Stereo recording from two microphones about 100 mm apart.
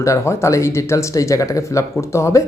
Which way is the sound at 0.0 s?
30° left (ahead or behind).